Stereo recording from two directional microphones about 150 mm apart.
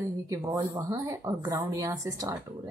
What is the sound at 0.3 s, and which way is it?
Speech, 20° right (ahead or behind).